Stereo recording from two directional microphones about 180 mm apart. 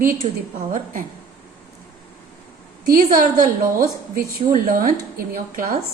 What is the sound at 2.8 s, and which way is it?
A woman's voice, 50° right (ahead or behind).